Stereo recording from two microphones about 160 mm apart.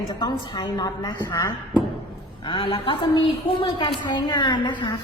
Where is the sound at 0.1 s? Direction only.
25° left (ahead or behind).